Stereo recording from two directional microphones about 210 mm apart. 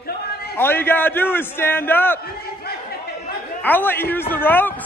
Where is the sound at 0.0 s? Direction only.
50° left (ahead or behind).